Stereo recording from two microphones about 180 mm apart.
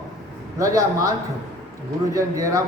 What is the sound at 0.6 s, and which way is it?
Speech, 20° right (ahead or behind).